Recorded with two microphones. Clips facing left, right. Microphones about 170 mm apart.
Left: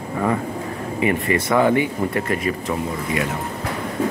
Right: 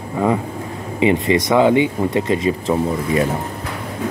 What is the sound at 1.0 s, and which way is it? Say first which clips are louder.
Speech: right 5 dB; 20° right (ahead or behind).